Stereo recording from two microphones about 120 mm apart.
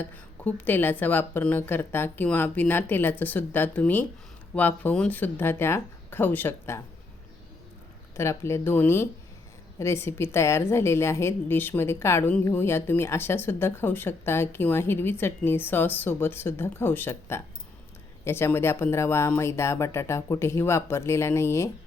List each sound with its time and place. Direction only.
0.0 s a woman's voice: 15° left (ahead or behind)
8.1 s a woman's voice: 20° left (ahead or behind)